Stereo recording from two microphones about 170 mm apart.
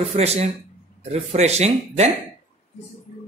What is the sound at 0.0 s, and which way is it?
Speech, 40° right (ahead or behind).